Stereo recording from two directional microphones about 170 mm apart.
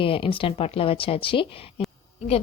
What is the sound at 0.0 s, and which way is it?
Speech, 30° left (ahead or behind).